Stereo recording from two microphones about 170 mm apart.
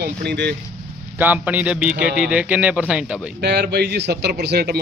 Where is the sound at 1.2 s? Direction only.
10° right (ahead or behind).